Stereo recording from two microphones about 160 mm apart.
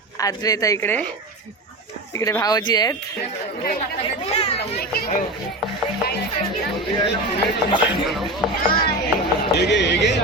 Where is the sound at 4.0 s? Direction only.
40° left (ahead or behind).